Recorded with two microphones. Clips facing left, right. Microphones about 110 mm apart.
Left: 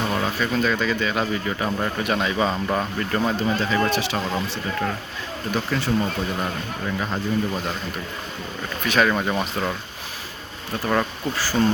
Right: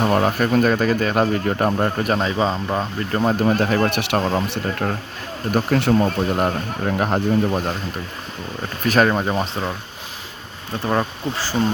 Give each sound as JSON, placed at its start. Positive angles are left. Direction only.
{"t": 0.1, "sound": "speech", "side_deg": -50}
{"t": 3.3, "sound": "speech", "side_deg": -55}
{"t": 8.8, "sound": "speech", "side_deg": -40}
{"t": 9.1, "sound": "speech", "side_deg": -25}
{"t": 10.8, "sound": "speech", "side_deg": -20}